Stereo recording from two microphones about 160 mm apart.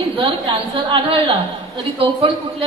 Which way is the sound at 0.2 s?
30° right (ahead or behind).